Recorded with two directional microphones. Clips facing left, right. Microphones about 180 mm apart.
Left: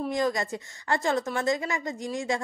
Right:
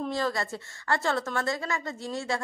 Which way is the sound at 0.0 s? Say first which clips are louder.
Left 2 dB; 15° left (ahead or behind).